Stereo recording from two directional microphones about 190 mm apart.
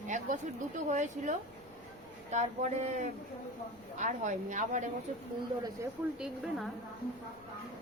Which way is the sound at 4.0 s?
40° right (ahead or behind).